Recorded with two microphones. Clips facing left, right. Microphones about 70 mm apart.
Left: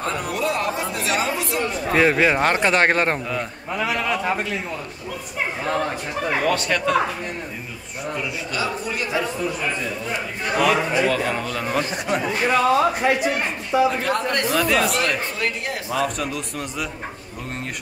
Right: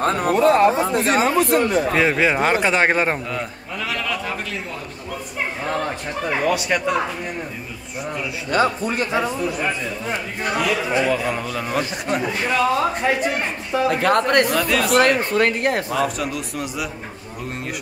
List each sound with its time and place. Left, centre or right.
0.0 s speech: right
1.9 s a man's voice: centre
3.7 s a man's voice: centre
5.7 s a man's voice: centre
6.5 s speech: centre
8.5 s speech: right
9.2 s a man's voice: centre
11.1 s a man's voice: centre
14.0 s speech: right
14.5 s a man's voice: centre
14.9 s speech: right
15.9 s a man's voice: centre